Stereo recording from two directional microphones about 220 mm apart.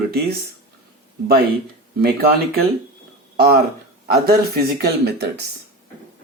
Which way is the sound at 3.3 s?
45° right (ahead or behind).